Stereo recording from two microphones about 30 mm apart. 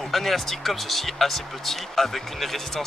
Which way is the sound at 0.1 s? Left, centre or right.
Centre.